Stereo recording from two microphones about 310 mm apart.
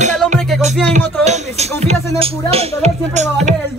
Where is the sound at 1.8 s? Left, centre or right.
Centre.